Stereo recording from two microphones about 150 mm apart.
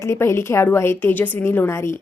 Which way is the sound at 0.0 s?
20° left (ahead or behind).